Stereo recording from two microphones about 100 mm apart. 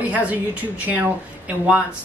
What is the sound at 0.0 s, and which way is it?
Speech, 15° right (ahead or behind).